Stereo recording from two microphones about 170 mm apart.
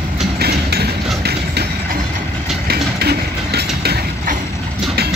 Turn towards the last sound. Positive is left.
turn(degrees=-70)  # may be behind; listen again after turning